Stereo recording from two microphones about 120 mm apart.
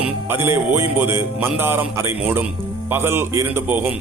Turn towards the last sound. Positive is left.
turn(degrees=-15)  # may be behind; listen again after turning